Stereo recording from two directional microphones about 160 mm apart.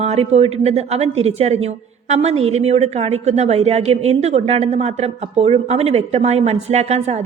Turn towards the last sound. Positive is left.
turn(degrees=-45)  # may be behind; listen again after turning